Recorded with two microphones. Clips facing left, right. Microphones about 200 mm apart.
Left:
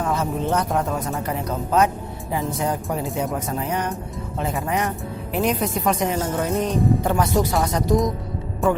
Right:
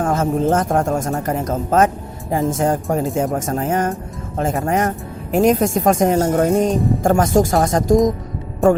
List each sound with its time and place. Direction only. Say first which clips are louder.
0.0 s speech: right 6 dB; 45° right (ahead or behind)